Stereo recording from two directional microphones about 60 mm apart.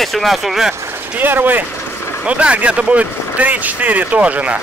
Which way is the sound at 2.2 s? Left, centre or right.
Centre.